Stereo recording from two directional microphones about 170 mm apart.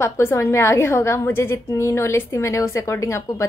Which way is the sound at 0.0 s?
15° left (ahead or behind).